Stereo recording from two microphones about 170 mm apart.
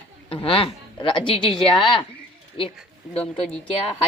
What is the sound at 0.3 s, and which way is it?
A woman's voice, 35° left (ahead or behind).